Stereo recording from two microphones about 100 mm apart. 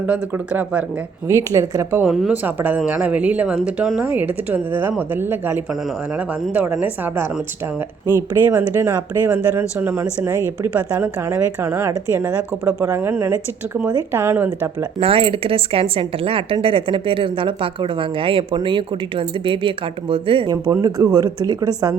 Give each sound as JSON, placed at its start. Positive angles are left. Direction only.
{"t": 0.1, "sound": "speech", "side_deg": -10}
{"t": 1.3, "sound": "a woman's voice", "side_deg": -25}
{"t": 2.3, "sound": "a woman's voice", "side_deg": -20}
{"t": 6.8, "sound": "a woman's voice", "side_deg": -20}
{"t": 14.9, "sound": "a woman's voice", "side_deg": -65}
{"t": 20.5, "sound": "a woman's voice", "side_deg": -35}